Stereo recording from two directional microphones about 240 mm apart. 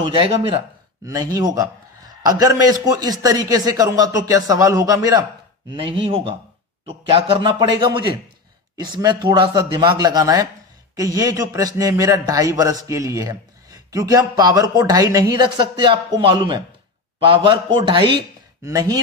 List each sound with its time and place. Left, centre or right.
0.0 s a man's voice: right